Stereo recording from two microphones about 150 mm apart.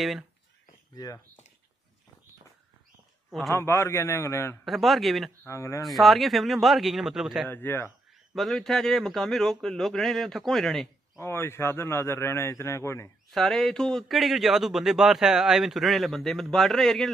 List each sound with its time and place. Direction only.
0.9 s speech: 25° left (ahead or behind)
3.3 s a man's voice: centre (ahead or behind)
3.5 s a man's voice: 15° left (ahead or behind)
4.6 s speech: centre (ahead or behind)
5.4 s speech: 20° left (ahead or behind)
5.9 s speech: centre (ahead or behind)
7.4 s a man's voice: 15° left (ahead or behind)
8.4 s speech: centre (ahead or behind)
11.1 s a man's voice: 15° left (ahead or behind)
13.3 s speech: centre (ahead or behind)